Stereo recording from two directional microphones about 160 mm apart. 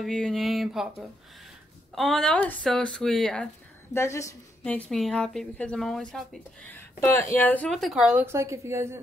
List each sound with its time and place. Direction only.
0.0 s speech: 5° left (ahead or behind)
2.0 s speech: 5° left (ahead or behind)
3.9 s a woman's voice: 15° left (ahead or behind)
4.6 s speech: 5° left (ahead or behind)
6.8 s a woman's voice: 15° left (ahead or behind); by 9.0 s 15° right (ahead or behind)